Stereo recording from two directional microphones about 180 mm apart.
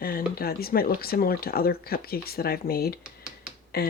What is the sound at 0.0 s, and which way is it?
Speech, 55° left (ahead or behind).